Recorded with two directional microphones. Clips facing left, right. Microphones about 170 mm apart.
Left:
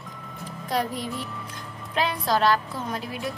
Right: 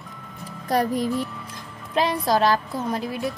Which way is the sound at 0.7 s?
45° right (ahead or behind).